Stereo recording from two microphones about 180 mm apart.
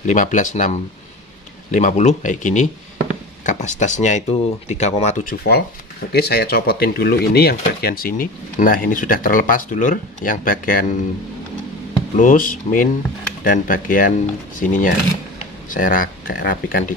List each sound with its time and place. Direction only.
0.0 s speech: 45° left (ahead or behind)
6.1 s speech: 60° left (ahead or behind)
12.2 s speech: 50° left (ahead or behind)